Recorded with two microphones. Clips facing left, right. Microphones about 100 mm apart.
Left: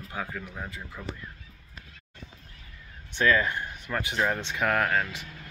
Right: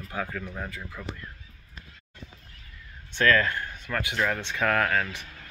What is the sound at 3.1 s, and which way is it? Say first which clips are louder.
Speech: right 1 dB; 15° left (ahead or behind).